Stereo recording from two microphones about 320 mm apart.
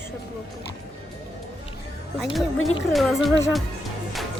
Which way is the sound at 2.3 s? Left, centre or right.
Centre.